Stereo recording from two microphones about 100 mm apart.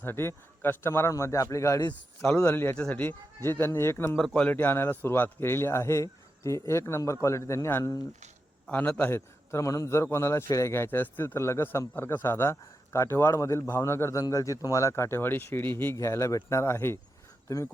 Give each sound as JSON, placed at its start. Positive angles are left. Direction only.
{"t": 0.0, "sound": "a man's voice", "side_deg": 25}
{"t": 8.7, "sound": "a man's voice", "side_deg": 15}